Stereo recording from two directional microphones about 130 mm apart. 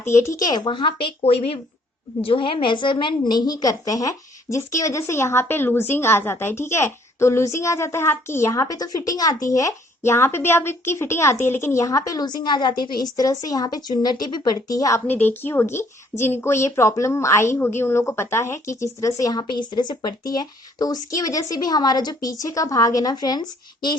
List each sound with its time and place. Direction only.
0.0 s a woman's voice: 20° left (ahead or behind)
15.0 s a woman's voice: 15° left (ahead or behind); by 24.0 s 35° left (ahead or behind)